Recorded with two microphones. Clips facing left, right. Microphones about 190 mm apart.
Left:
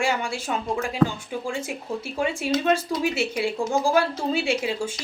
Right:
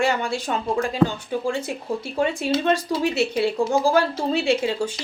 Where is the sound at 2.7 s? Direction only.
35° right (ahead or behind).